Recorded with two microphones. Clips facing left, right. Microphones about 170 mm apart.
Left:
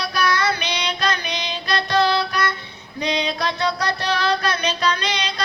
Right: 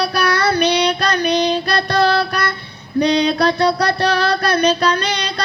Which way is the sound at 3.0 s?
65° right (ahead or behind).